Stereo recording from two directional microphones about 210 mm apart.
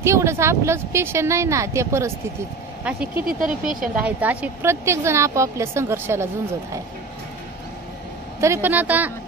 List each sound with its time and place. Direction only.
0.0 s speech: 15° right (ahead or behind)
3.2 s speech: 40° right (ahead or behind)
4.0 s speech: 5° right (ahead or behind)
8.4 s speech: 10° right (ahead or behind)